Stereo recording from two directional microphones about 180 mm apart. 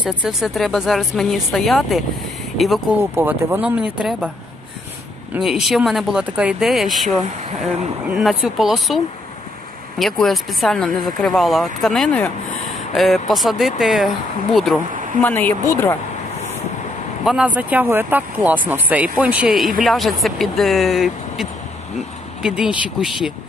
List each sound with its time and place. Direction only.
0.0 s speech: 5° right (ahead or behind)
3.0 s speech: 15° right (ahead or behind)
5.3 s speech: centre (ahead or behind)
8.1 s speech: centre (ahead or behind); by 16.0 s 15° left (ahead or behind)
17.2 s speech: centre (ahead or behind)